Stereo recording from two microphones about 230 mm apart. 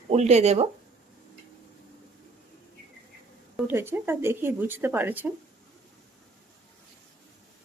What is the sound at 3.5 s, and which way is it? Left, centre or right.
Speech, centre.